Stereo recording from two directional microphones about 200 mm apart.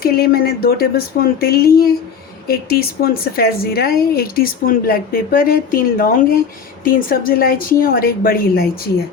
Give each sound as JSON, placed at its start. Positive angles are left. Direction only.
{"t": 0.0, "sound": "speech", "side_deg": 50}